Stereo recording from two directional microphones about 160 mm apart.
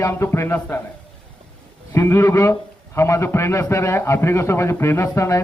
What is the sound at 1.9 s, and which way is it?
A man's voice, 15° left (ahead or behind).